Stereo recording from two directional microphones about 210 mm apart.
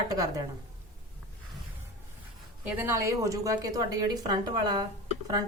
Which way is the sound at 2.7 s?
15° right (ahead or behind).